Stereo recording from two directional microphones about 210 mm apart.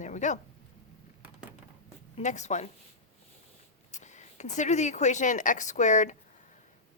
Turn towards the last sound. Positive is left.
turn(degrees=35)  # may be behind; listen again after turning